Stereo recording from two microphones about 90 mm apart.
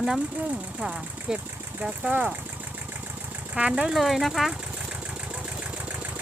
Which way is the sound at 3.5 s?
10° right (ahead or behind).